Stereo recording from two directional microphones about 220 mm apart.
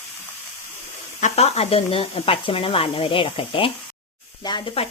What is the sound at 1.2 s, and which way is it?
Speech, 30° left (ahead or behind).